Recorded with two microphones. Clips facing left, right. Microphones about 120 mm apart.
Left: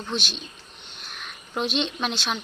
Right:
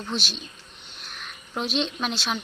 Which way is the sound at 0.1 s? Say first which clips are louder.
Left 1 dB; centre (ahead or behind).